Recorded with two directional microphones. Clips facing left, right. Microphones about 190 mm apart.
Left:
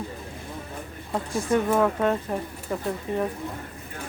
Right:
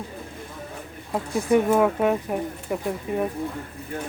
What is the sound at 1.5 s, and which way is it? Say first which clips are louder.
Speech: right 3 dB; 10° right (ahead or behind).